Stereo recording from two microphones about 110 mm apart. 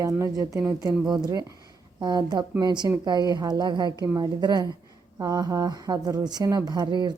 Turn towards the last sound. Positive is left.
turn(degrees=-40)  # may be behind; listen again after turning